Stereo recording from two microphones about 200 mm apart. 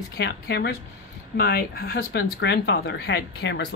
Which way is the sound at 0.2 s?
55° left (ahead or behind).